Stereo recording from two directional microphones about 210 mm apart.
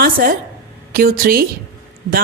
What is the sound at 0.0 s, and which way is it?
A woman's voice, 45° right (ahead or behind).